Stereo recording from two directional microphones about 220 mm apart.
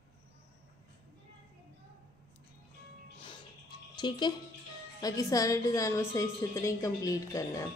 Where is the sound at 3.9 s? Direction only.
20° left (ahead or behind).